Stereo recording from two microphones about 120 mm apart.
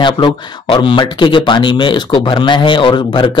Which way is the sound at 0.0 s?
40° left (ahead or behind).